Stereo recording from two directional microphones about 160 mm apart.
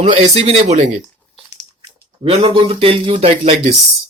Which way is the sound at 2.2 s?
35° right (ahead or behind).